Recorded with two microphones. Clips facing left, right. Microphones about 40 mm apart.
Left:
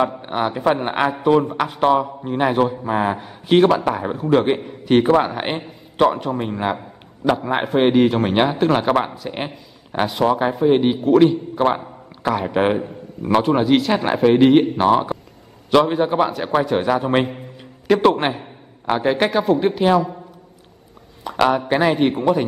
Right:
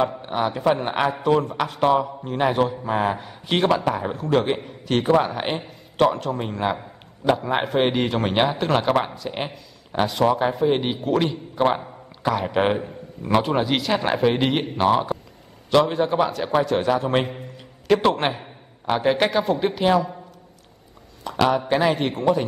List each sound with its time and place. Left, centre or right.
0.2 s a man's voice: centre
21.2 s a man's voice: centre